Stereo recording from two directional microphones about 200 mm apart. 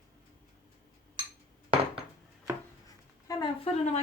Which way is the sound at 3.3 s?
20° left (ahead or behind).